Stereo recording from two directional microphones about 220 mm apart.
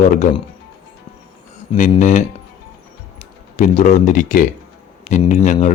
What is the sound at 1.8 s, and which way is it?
Speech, 35° left (ahead or behind).